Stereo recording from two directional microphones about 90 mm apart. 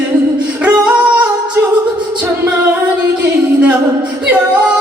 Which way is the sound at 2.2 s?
20° right (ahead or behind).